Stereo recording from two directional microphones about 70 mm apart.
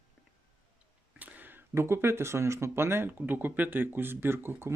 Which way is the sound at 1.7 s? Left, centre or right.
Right.